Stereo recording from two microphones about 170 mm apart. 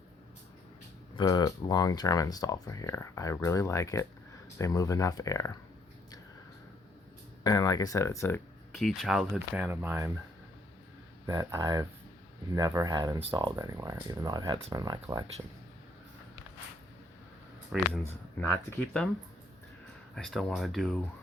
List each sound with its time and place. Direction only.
1.1 s speech: 25° left (ahead or behind)
7.4 s speech: 20° left (ahead or behind)
8.7 s speech: centre (ahead or behind)
11.3 s speech: 20° right (ahead or behind)
17.7 s speech: 5° right (ahead or behind)
18.3 s speech: 10° left (ahead or behind)
20.1 s speech: centre (ahead or behind)